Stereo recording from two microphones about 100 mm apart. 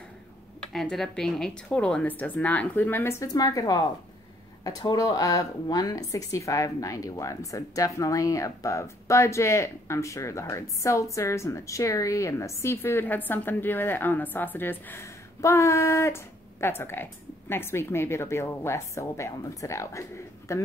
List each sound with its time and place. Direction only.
0.6 s a woman's voice: 5° left (ahead or behind); by 3.2 s 20° left (ahead or behind)
3.2 s speech: 40° left (ahead or behind)